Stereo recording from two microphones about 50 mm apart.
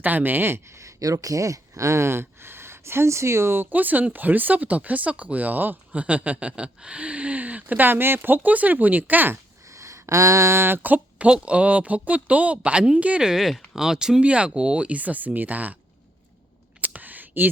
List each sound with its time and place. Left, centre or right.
0.0 s speech: right
0.8 s speech: right
3.7 s speech: right
5.9 s speech: right
9.6 s a sound: right
10.8 s speech: right
13.2 s speech: centre
14.2 s speech: right
16.8 s a sound: right